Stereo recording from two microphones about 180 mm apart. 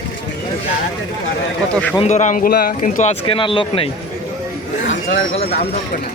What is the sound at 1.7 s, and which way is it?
Speech, 5° left (ahead or behind).